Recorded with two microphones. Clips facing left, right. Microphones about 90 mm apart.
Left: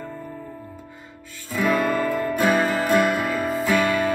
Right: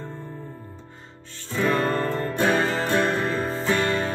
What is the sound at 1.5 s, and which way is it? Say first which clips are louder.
Music: left 1 dB; 10° left (ahead or behind).